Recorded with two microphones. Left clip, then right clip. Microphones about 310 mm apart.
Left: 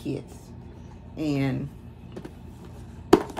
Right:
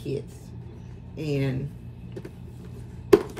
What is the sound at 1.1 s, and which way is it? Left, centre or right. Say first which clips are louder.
Speech: left 1 dB; centre.